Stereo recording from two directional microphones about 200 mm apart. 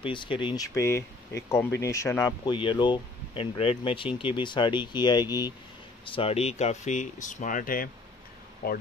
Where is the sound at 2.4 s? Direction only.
25° left (ahead or behind).